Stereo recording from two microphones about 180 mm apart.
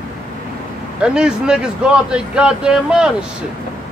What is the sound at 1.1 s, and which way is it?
A man's voice, 5° right (ahead or behind).